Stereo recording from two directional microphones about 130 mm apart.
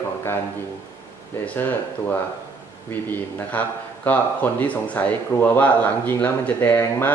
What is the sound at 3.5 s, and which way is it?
Speech, 10° left (ahead or behind).